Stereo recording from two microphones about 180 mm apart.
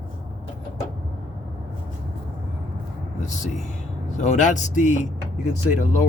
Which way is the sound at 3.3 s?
40° left (ahead or behind).